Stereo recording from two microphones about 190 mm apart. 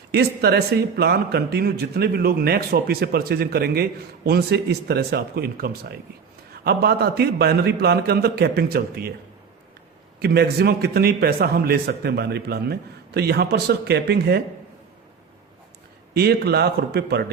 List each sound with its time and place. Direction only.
0.1 s a man's voice: 55° right (ahead or behind)
10.2 s a man's voice: 55° right (ahead or behind)
16.1 s a man's voice: 55° right (ahead or behind)